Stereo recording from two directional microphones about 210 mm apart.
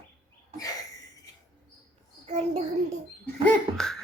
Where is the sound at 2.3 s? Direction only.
30° right (ahead or behind).